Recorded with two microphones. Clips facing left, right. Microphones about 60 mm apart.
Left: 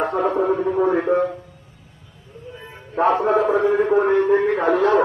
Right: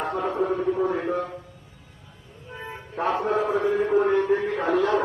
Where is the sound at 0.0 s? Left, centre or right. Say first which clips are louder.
Left 6 dB; left.